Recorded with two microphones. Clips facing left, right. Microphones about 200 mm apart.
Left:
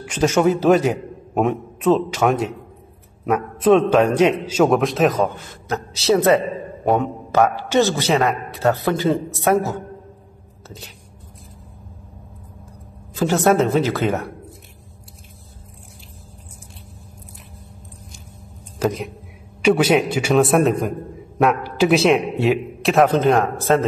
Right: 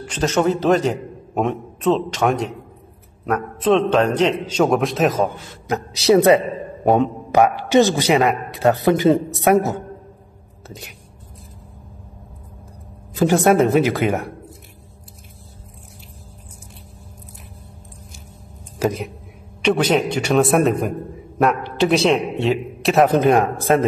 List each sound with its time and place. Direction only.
0.0 s a man's voice: 10° left (ahead or behind)
5.7 s a man's voice: 15° right (ahead or behind)
13.1 s a man's voice: 15° right (ahead or behind)
18.8 s speech: 5° right (ahead or behind)
19.6 s a man's voice: 10° left (ahead or behind)
23.1 s a man's voice: 15° right (ahead or behind)